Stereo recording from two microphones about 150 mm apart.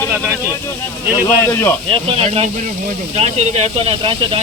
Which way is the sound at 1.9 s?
40° right (ahead or behind).